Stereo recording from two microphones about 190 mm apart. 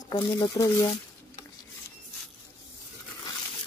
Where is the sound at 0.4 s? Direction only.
25° left (ahead or behind).